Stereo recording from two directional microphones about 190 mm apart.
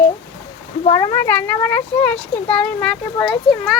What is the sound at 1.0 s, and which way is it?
A child's voice, 15° left (ahead or behind).